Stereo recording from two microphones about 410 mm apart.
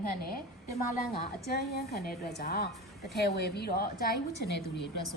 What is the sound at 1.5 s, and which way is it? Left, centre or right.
A woman's voice, left.